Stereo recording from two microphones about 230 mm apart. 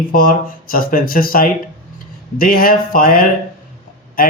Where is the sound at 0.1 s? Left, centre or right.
Left.